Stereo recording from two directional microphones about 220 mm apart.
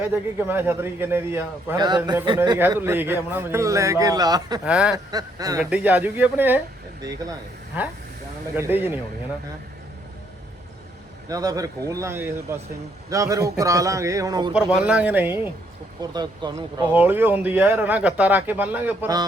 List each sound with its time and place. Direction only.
0.1 s a man's voice: 10° right (ahead or behind)
4.6 s speech: 5° right (ahead or behind)
5.1 s a man's voice: 15° right (ahead or behind)
8.5 s a man's voice: 10° right (ahead or behind)
11.3 s a man's voice: 15° right (ahead or behind)
14.5 s a man's voice: 5° right (ahead or behind)
16.0 s speech: 20° right (ahead or behind)
16.9 s a man's voice: 10° right (ahead or behind)